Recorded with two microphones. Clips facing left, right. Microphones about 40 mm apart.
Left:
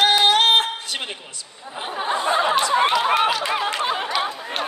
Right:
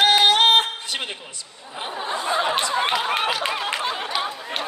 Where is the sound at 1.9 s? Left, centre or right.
Left.